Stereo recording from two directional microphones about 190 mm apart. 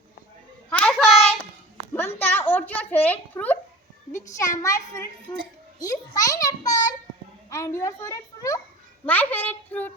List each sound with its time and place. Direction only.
0.7 s hands: 5° left (ahead or behind)
1.9 s a sound: 10° left (ahead or behind)
4.1 s a woman's voice: 15° left (ahead or behind)